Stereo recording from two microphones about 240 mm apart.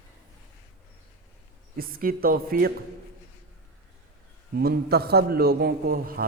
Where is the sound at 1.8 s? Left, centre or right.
Right.